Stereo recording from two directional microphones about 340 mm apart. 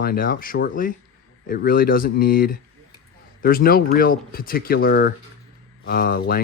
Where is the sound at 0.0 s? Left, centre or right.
Left.